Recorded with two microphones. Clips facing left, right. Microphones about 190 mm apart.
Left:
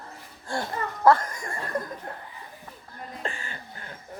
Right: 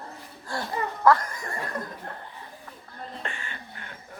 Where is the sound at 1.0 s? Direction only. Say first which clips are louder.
Left 1 dB; 30° left (ahead or behind).